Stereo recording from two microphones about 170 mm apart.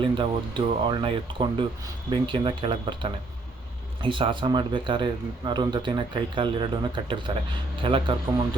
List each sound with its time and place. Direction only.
0.0 s speech: 30° right (ahead or behind)